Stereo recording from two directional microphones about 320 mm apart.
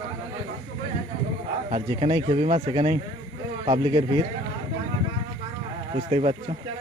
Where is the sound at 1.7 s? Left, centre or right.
Centre.